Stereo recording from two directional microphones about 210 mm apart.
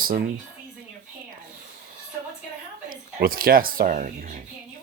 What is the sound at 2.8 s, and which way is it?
A woman's voice, 45° right (ahead or behind).